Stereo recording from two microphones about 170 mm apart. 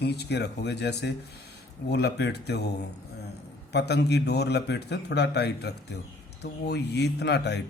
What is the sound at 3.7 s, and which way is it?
Mantra, 75° left (ahead or behind).